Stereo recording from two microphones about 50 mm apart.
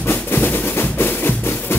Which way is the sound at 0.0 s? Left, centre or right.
Left.